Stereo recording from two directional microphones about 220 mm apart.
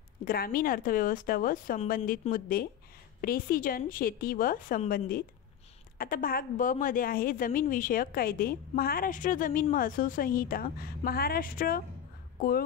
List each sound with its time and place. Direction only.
0.2 s a woman's voice: 40° left (ahead or behind)